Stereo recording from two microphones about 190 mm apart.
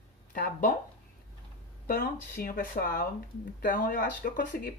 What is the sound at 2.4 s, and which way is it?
Speech, 50° left (ahead or behind).